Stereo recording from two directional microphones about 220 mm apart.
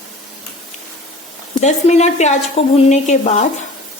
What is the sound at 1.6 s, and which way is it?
Speech, 30° left (ahead or behind).